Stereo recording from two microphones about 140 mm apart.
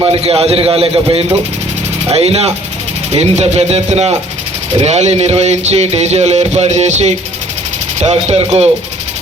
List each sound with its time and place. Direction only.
0.0 s speech: 40° right (ahead or behind)
2.0 s speech: 45° right (ahead or behind)